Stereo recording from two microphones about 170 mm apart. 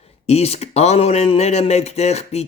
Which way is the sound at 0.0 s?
35° left (ahead or behind).